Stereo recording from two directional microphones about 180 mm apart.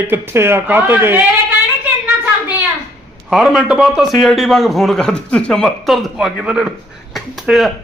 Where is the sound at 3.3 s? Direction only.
Centre (ahead or behind).